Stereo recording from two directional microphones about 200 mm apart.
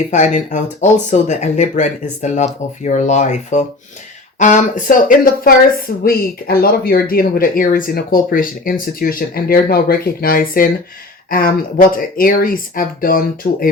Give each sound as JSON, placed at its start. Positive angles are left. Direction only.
{"t": 0.1, "sound": "speech", "side_deg": 35}